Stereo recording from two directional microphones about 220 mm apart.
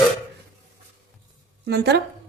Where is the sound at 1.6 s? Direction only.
50° right (ahead or behind).